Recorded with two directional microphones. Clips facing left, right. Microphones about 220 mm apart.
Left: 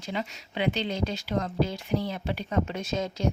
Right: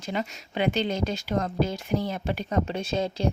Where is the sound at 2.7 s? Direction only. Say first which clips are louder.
Right 3 dB; 30° right (ahead or behind).